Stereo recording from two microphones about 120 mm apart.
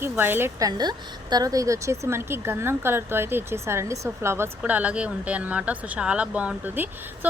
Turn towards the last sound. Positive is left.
turn(degrees=-15)  # may be behind; listen again after turning